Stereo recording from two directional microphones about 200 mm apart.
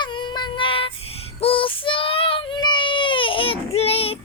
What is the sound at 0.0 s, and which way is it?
Child singing, 25° left (ahead or behind).